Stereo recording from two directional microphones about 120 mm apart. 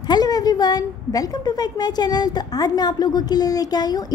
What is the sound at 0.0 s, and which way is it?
A woman's voice, 35° left (ahead or behind).